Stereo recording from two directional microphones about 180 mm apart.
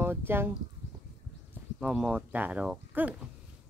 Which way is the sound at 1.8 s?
5° right (ahead or behind).